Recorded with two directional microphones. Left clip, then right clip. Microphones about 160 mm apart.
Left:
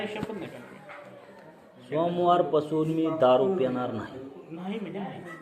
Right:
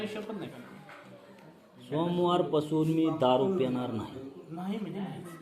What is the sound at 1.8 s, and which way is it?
Speech, 40° right (ahead or behind).